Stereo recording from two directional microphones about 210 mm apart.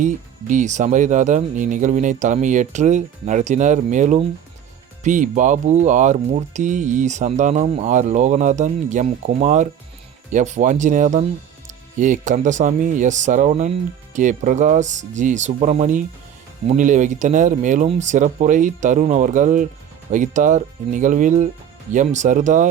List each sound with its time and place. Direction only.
0.0 s speech: 35° right (ahead or behind)